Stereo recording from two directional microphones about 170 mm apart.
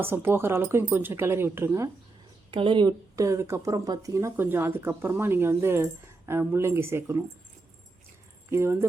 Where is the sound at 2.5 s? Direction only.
30° right (ahead or behind).